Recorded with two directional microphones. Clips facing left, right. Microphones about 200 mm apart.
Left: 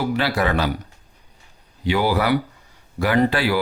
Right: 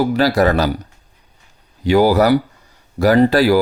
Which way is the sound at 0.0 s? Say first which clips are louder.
Right 7 dB; 40° right (ahead or behind).